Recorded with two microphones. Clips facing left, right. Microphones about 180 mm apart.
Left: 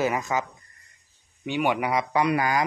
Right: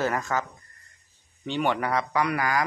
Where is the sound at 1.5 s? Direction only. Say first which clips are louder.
Left 1 dB; 10° left (ahead or behind).